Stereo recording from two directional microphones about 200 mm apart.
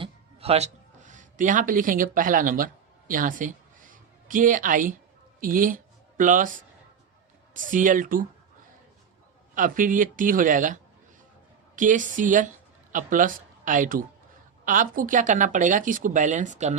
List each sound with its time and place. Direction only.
0.0 s music: 30° right (ahead or behind)
3.1 s speech: 40° right (ahead or behind)
5.4 s a sound: 45° right (ahead or behind)
7.5 s speech: 40° right (ahead or behind)
9.6 s speech: 40° right (ahead or behind)
11.8 s speech: 40° right (ahead or behind)